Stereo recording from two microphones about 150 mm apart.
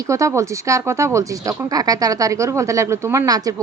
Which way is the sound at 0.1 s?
20° right (ahead or behind).